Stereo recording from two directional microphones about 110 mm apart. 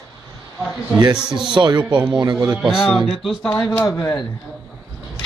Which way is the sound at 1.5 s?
45° right (ahead or behind).